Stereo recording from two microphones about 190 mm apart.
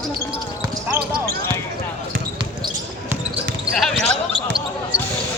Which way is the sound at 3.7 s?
Centre (ahead or behind).